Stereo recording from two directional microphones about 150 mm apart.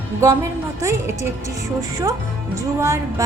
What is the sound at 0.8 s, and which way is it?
A woman's voice, 20° right (ahead or behind).